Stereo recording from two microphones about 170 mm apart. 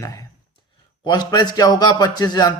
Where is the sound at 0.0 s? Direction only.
20° left (ahead or behind).